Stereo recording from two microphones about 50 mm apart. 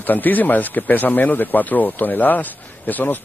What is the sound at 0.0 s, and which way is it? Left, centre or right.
Speech, left.